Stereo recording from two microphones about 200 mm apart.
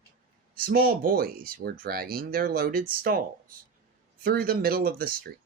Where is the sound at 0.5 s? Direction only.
45° right (ahead or behind).